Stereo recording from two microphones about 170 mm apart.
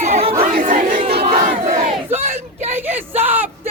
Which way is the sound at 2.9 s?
10° right (ahead or behind).